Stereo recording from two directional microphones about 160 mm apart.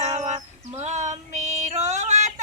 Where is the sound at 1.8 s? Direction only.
45° right (ahead or behind).